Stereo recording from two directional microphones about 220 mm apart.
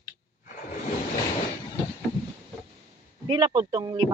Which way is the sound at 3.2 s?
20° right (ahead or behind).